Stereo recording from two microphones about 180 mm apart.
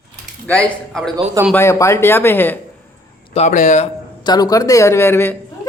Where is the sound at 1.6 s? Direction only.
15° left (ahead or behind).